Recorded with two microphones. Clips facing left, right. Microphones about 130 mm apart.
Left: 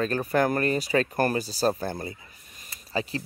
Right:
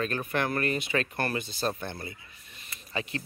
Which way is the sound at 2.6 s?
30° left (ahead or behind).